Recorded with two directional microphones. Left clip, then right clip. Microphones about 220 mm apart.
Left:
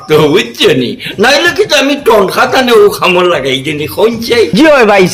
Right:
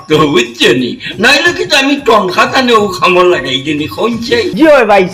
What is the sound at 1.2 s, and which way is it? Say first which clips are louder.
Speech: left 1 dB; 45° left (ahead or behind).